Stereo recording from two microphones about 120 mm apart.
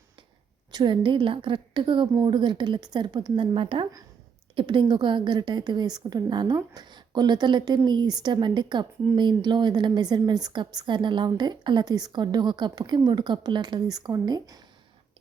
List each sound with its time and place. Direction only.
0.7 s a woman's voice: 40° right (ahead or behind)